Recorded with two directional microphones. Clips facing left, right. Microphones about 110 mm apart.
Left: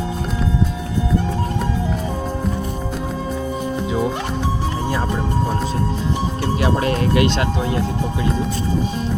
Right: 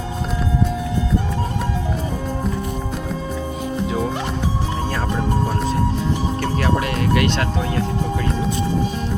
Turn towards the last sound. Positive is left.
turn(degrees=20)  # may be behind; listen again after turning